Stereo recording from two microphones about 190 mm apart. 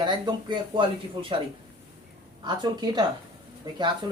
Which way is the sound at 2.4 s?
20° right (ahead or behind).